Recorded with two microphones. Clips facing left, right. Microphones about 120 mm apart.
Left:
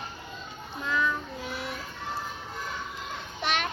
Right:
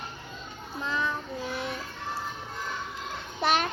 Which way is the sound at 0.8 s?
30° right (ahead or behind).